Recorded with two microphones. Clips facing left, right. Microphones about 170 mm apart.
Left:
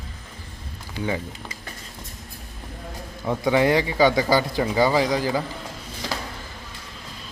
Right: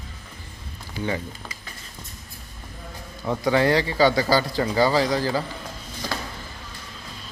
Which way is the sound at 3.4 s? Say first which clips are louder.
Left 1 dB; 20° left (ahead or behind).